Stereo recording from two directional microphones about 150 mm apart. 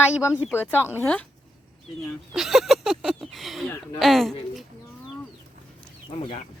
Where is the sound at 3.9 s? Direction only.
Centre (ahead or behind).